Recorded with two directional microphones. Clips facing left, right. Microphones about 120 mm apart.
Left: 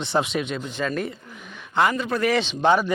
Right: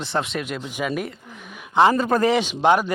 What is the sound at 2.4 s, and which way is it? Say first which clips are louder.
Speech: right 1 dB; 10° right (ahead or behind).